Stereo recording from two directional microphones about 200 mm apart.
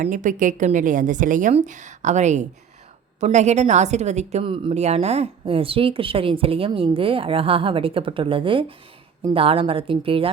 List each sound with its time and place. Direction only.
0.0 s a woman's voice: 40° right (ahead or behind)